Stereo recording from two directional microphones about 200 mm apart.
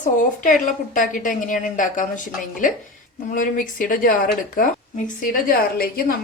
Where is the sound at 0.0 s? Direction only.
40° left (ahead or behind).